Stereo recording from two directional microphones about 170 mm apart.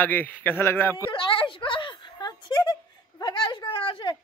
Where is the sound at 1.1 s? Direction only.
30° left (ahead or behind).